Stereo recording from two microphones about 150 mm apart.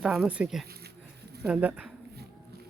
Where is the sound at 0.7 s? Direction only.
90° right.